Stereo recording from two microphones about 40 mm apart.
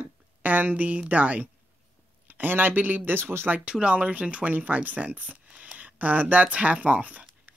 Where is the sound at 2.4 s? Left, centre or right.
Right.